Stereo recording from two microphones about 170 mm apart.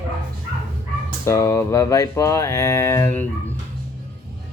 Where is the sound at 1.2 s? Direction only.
20° left (ahead or behind).